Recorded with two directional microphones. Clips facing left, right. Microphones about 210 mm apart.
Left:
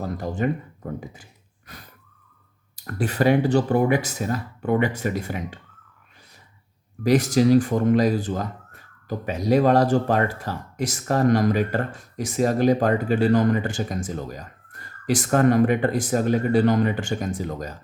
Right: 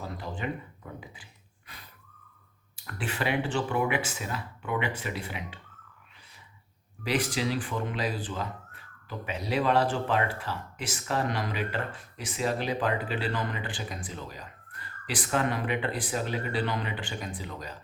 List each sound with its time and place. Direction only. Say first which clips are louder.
0.0 s speech: left 10 dB; 45° left (ahead or behind)
7.0 s speech: left 11 dB; 45° left (ahead or behind)